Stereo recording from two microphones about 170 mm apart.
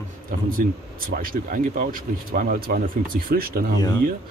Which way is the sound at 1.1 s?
55° right (ahead or behind).